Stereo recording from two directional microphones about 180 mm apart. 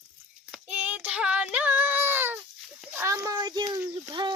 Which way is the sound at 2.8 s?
10° right (ahead or behind).